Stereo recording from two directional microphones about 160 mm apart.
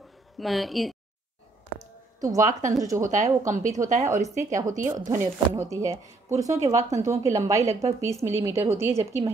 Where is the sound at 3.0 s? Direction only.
55° right (ahead or behind).